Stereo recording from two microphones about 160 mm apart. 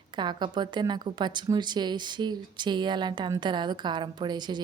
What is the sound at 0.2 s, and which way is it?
A woman's voice, 30° right (ahead or behind).